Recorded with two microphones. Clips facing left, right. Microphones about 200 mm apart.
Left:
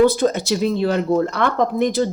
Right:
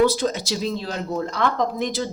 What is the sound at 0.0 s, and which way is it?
Speech, 55° left (ahead or behind).